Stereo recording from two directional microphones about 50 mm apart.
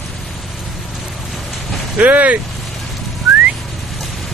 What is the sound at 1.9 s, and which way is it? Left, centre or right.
Speech, right.